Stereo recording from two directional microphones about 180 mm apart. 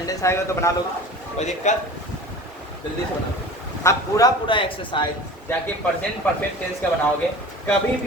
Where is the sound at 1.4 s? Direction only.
40° left (ahead or behind).